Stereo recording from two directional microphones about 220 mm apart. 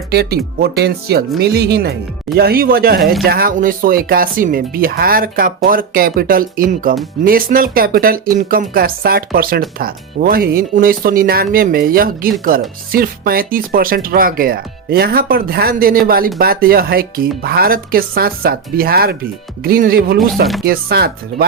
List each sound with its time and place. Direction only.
0.1 s speech: 45° right (ahead or behind)